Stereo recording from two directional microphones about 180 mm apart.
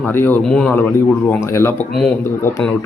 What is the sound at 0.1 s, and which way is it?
Speech, 10° left (ahead or behind).